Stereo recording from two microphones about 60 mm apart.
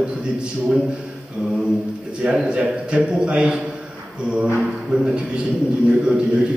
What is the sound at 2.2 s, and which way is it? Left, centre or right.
A man's voice, right.